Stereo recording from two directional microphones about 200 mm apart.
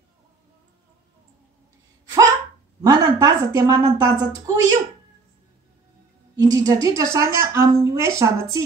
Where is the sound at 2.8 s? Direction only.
20° right (ahead or behind).